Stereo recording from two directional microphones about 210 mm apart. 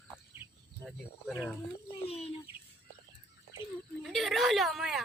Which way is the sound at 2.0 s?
30° left (ahead or behind).